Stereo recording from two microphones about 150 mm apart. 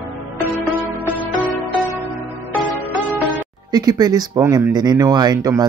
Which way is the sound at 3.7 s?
25° right (ahead or behind).